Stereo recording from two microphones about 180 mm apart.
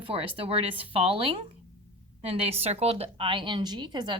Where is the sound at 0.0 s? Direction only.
30° right (ahead or behind).